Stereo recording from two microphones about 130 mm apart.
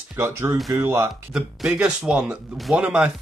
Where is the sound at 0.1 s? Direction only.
15° right (ahead or behind).